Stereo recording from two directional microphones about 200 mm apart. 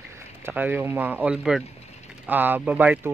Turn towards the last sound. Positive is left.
turn(degrees=-5)  # may be behind; listen again after turning